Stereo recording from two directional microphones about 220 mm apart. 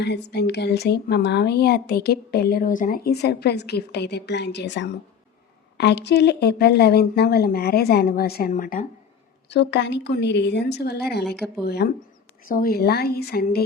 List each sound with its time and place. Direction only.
0.0 s speech: 50° left (ahead or behind)
9.5 s speech: 50° left (ahead or behind)